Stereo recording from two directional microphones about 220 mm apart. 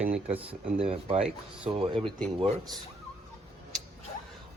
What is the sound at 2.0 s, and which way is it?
Speech, 5° left (ahead or behind).